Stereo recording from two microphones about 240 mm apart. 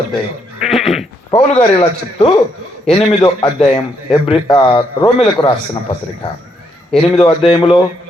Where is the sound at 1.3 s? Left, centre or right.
Left.